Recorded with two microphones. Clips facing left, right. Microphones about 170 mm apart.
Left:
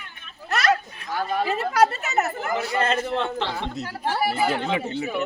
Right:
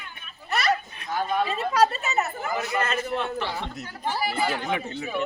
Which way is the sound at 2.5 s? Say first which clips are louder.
Left 3 dB; 30° left (ahead or behind).